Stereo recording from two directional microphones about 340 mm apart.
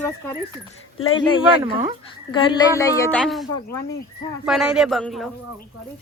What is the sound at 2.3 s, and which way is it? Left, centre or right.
Speech, centre.